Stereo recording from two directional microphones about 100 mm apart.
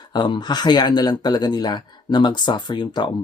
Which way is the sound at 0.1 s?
50° left (ahead or behind).